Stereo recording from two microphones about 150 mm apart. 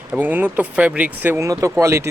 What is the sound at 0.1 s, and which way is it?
Speech, 10° right (ahead or behind).